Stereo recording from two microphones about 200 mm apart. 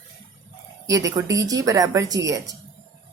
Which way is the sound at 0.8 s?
15° right (ahead or behind).